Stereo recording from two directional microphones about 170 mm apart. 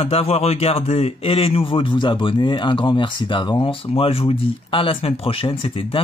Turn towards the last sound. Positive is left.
turn(degrees=30)  # may be behind; listen again after turning